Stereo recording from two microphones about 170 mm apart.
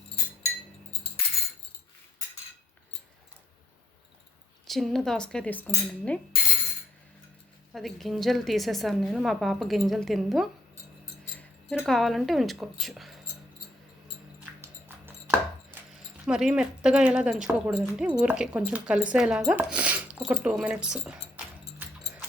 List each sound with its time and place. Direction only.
4.6 s speech: centre (ahead or behind)
7.7 s speech: centre (ahead or behind)
14.6 s mouse: 15° right (ahead or behind)
16.0 s speech: 5° right (ahead or behind)
21.8 s dog: 10° right (ahead or behind)